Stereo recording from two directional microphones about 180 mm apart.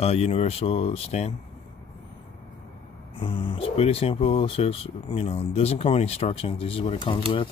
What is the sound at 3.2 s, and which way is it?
Speech, 30° left (ahead or behind).